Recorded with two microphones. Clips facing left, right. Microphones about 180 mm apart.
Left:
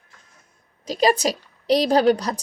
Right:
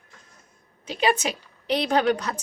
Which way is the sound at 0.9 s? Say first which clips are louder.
Left 4 dB; 40° left (ahead or behind).